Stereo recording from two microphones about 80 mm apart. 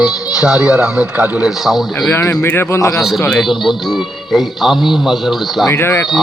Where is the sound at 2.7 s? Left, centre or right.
Left.